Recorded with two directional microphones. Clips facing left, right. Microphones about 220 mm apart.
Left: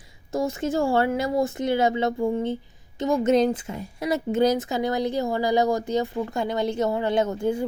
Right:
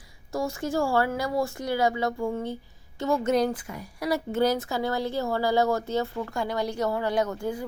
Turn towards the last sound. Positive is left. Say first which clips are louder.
# left 4 dB
turn(degrees=25)  # may be behind; listen again after turning